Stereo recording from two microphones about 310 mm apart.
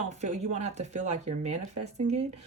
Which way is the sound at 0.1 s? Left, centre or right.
Right.